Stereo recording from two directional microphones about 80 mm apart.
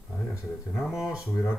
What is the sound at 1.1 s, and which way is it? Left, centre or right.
Speech, left.